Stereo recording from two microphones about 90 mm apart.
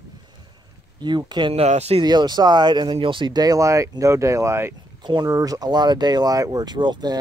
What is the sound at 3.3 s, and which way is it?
Speech, 45° right (ahead or behind).